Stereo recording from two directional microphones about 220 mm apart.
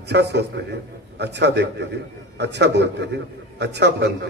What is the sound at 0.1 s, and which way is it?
A man's voice, 50° right (ahead or behind).